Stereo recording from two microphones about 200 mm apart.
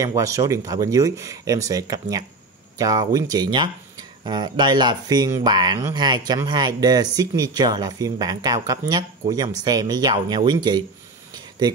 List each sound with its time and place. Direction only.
0.0 s speech: 15° right (ahead or behind)